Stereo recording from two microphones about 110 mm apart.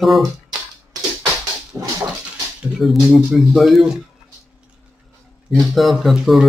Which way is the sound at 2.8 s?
5° right (ahead or behind).